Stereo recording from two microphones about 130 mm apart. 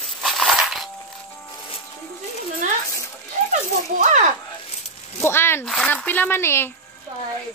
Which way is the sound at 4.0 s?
70° right (ahead or behind).